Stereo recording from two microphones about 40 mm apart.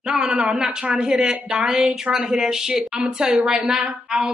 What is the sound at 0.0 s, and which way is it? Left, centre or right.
A woman's voice, centre.